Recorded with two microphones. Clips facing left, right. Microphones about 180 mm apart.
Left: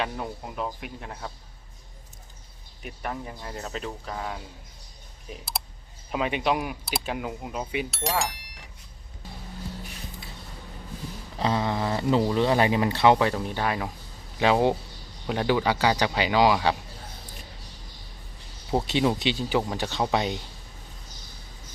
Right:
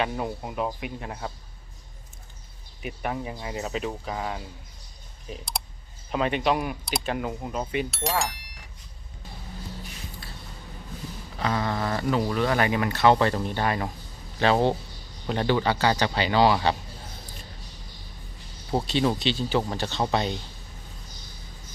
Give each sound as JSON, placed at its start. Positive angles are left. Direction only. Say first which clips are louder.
{"t": 0.0, "sound": "speech", "louder": "right 3 dB", "side_deg": -5}
{"t": 2.8, "sound": "speech", "louder": "right 3 dB", "side_deg": -5}
{"t": 11.3, "sound": "speech", "louder": "left 1 dB", "side_deg": 25}
{"t": 13.1, "sound": "speech", "louder": "right 1 dB", "side_deg": 5}
{"t": 18.7, "sound": "speech", "louder": "even", "side_deg": 15}